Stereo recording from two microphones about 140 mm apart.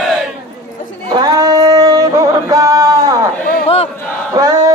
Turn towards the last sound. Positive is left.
turn(degrees=-25)  # may be behind; listen again after turning